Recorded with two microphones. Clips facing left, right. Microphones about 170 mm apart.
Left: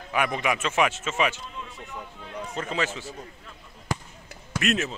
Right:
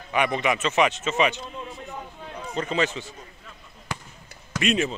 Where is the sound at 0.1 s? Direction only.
5° left (ahead or behind).